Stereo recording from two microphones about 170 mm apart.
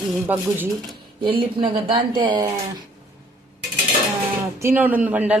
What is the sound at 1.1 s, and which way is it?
Speech, 30° right (ahead or behind).